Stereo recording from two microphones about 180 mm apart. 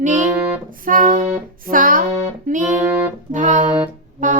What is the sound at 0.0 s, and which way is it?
Music, 45° right (ahead or behind).